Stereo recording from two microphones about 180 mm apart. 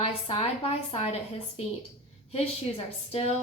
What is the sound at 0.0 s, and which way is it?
A woman's voice, 35° left (ahead or behind).